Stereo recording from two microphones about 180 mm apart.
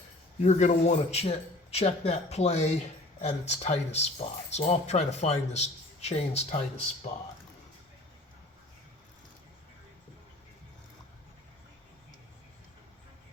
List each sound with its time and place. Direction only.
0.4 s speech: 40° left (ahead or behind)